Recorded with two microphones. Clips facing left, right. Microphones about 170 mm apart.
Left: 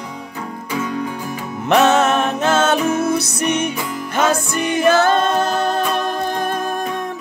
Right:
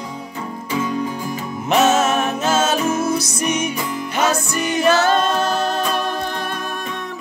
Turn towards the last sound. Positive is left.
turn(degrees=55)  # may be behind; listen again after turning